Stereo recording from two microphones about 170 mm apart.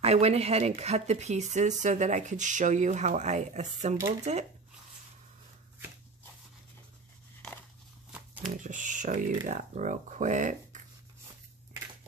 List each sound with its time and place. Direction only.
0.0 s speech: 35° right (ahead or behind)
8.4 s speech: 50° right (ahead or behind)